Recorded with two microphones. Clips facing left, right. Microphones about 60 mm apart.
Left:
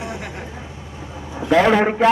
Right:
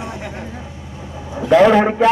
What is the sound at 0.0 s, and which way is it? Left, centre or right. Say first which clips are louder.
Vehicle: right 1 dB; centre.